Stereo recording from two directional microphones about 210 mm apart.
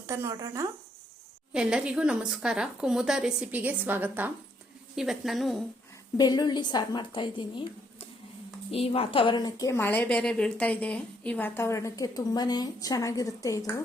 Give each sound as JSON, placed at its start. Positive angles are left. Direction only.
{"t": 0.0, "sound": "speech", "side_deg": -15}
{"t": 1.5, "sound": "a woman's voice", "side_deg": -5}
{"t": 6.1, "sound": "a woman's voice", "side_deg": 20}